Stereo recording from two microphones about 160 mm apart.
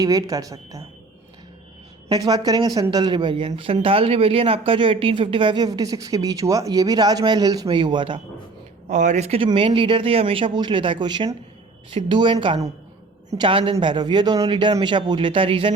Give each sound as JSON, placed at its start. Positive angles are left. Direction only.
{"t": 0.0, "sound": "speech", "side_deg": -20}
{"t": 2.0, "sound": "speech", "side_deg": -25}
{"t": 8.9, "sound": "speech", "side_deg": -50}